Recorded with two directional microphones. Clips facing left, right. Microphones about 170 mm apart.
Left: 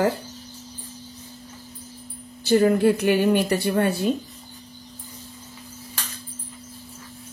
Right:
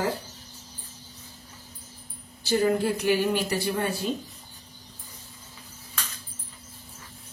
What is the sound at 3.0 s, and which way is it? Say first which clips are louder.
A woman's voice: left 5 dB; 60° left (ahead or behind).